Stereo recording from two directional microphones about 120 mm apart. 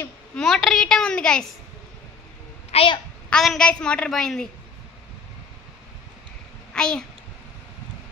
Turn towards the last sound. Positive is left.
turn(degrees=5)  # may be behind; listen again after turning